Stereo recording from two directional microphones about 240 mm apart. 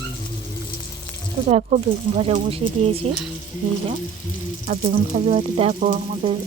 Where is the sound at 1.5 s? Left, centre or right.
Right.